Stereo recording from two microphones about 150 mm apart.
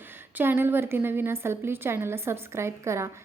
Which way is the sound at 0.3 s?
15° right (ahead or behind).